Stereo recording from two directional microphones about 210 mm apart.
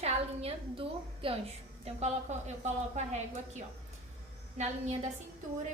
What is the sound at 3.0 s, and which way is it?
Speech, 35° right (ahead or behind).